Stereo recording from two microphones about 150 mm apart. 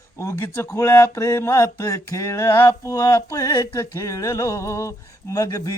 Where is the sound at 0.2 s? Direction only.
20° left (ahead or behind).